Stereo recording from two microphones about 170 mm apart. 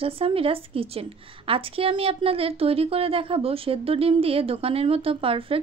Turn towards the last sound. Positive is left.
turn(degrees=-35)  # may be behind; listen again after turning